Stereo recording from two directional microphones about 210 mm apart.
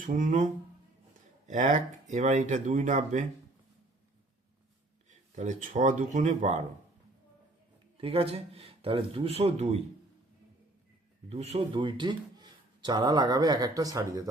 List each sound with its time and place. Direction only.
0.0 s speech: 40° right (ahead or behind)
5.0 s speech: 35° right (ahead or behind)
7.9 s a man's voice: 25° right (ahead or behind)
11.3 s a man's voice: 30° right (ahead or behind)